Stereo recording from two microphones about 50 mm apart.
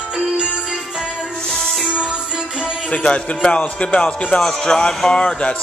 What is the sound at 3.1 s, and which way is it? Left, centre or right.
Speech, left.